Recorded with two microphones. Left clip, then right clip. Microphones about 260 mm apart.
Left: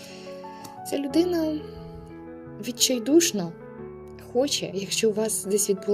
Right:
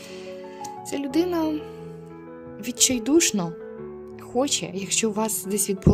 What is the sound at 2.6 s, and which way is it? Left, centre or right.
Speech, right.